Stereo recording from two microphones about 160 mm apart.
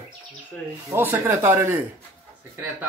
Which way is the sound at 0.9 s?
15° right (ahead or behind).